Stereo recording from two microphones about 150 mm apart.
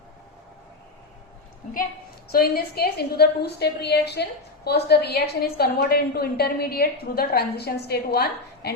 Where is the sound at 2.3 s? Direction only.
90° left.